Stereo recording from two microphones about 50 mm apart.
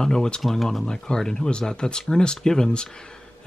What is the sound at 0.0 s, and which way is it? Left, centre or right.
Speech, centre.